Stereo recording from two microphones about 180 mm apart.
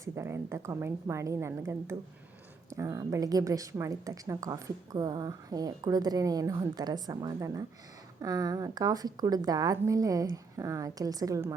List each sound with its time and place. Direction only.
0.0 s a woman's voice: 15° right (ahead or behind)